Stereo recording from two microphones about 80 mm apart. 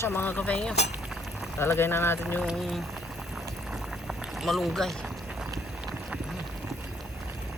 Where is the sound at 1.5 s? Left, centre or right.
Left.